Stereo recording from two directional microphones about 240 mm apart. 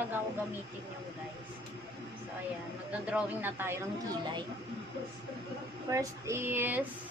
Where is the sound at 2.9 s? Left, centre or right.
Centre.